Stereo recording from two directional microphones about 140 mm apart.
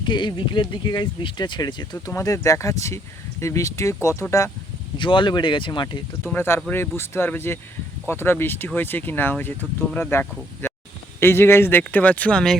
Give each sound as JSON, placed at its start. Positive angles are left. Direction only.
{"t": 0.0, "sound": "speech", "side_deg": 35}
{"t": 4.9, "sound": "speech", "side_deg": 35}
{"t": 6.2, "sound": "speech", "side_deg": 15}